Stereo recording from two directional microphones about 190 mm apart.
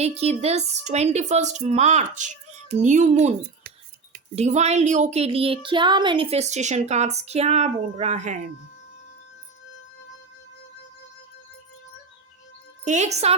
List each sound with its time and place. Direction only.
0.0 s speech: 35° right (ahead or behind)
4.4 s speech: 35° right (ahead or behind)
12.8 s speech: 40° right (ahead or behind)